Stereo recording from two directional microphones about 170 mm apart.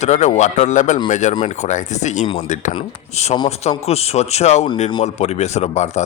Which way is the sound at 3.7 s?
35° left (ahead or behind).